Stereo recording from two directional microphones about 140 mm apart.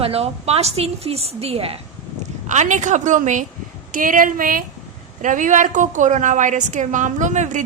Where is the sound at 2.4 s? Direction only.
60° right (ahead or behind).